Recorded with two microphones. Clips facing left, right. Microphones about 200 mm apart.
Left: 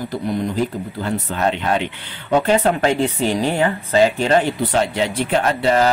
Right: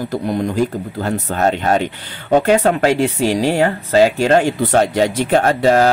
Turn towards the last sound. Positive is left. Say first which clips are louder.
# right 4 dB
turn(degrees=-45)  # may be behind; listen again after turning